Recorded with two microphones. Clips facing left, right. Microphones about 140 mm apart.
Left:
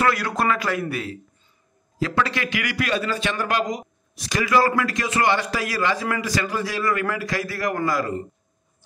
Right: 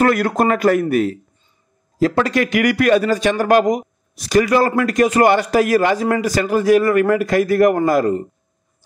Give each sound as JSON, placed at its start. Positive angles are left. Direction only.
{"t": 0.0, "sound": "a man's voice", "side_deg": -45}